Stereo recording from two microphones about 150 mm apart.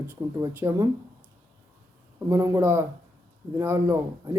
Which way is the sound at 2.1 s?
20° right (ahead or behind).